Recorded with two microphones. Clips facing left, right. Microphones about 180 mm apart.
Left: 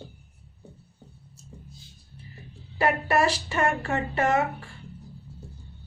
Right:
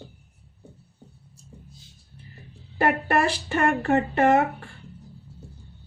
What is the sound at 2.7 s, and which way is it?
Speech, 55° right (ahead or behind).